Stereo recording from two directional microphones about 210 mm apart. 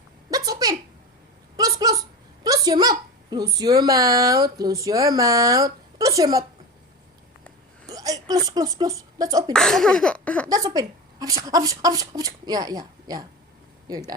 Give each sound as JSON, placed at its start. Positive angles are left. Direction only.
{"t": 0.3, "sound": "a sound", "side_deg": -15}
{"t": 1.5, "sound": "a woman's voice", "side_deg": -15}
{"t": 7.9, "sound": "a sound", "side_deg": -15}
{"t": 8.4, "sound": "speech", "side_deg": -15}
{"t": 9.5, "sound": "speech", "side_deg": 0}
{"t": 10.5, "sound": "a woman's voice", "side_deg": -15}